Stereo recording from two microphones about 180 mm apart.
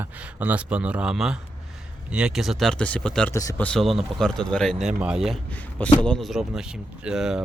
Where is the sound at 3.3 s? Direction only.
15° left (ahead or behind).